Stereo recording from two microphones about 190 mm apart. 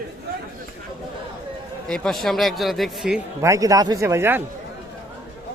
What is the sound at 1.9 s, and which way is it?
Speech, centre (ahead or behind).